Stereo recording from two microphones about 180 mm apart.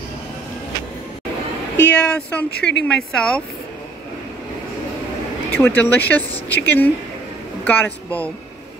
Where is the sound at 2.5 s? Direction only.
65° left (ahead or behind).